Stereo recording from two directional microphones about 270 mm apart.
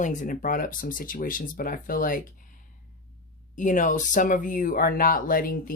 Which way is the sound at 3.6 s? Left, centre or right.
Left.